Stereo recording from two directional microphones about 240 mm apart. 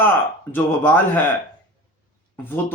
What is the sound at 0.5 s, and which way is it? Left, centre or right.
Speech, centre.